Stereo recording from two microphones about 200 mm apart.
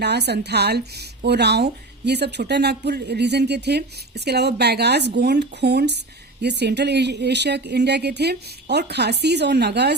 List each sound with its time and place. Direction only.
0.0 s speech: 55° right (ahead or behind)